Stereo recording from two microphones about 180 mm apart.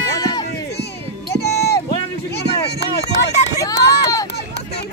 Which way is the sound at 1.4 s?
65° left (ahead or behind).